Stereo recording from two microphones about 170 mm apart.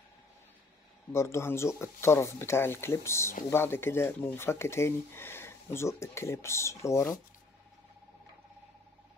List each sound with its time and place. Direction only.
1.1 s speech: 15° left (ahead or behind)